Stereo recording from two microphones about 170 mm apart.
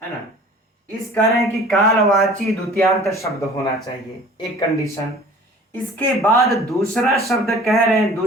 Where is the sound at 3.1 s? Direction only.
20° left (ahead or behind).